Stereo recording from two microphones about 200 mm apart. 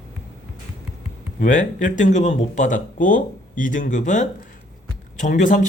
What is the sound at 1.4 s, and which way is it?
Speech, 40° left (ahead or behind).